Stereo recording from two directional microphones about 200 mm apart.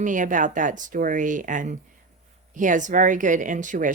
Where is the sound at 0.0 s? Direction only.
40° right (ahead or behind).